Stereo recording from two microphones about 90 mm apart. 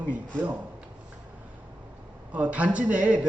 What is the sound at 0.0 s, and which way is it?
Speech, 15° right (ahead or behind).